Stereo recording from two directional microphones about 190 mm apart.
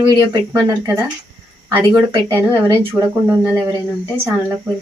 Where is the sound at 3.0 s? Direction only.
15° right (ahead or behind).